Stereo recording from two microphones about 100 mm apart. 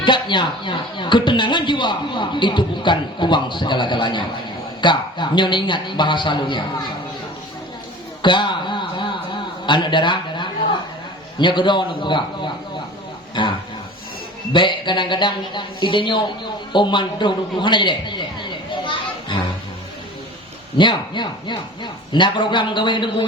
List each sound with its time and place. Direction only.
0.0 s speech: 50° left (ahead or behind)
8.2 s a sound: 50° left (ahead or behind)
11.3 s speech: 50° left (ahead or behind)
20.7 s speech: 50° left (ahead or behind)